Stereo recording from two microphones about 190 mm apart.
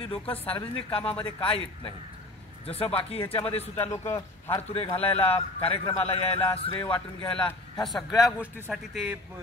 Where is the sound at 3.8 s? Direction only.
15° left (ahead or behind).